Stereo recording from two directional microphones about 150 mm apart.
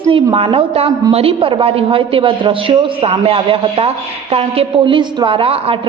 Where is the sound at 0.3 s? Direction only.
40° right (ahead or behind).